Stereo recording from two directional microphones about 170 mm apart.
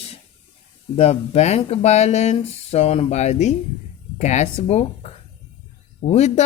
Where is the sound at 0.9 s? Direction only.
40° left (ahead or behind).